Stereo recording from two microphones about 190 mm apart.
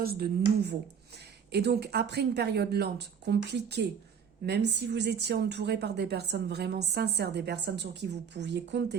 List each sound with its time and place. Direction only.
0.0 s speech: 55° right (ahead or behind)